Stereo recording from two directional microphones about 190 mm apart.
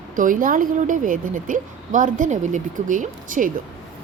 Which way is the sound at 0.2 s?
45° right (ahead or behind).